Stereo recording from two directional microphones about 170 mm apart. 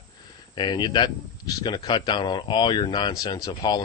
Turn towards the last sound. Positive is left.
turn(degrees=20)  # may be behind; listen again after turning